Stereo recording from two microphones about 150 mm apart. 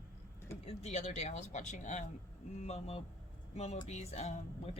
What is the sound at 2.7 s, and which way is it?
Speech, 40° left (ahead or behind).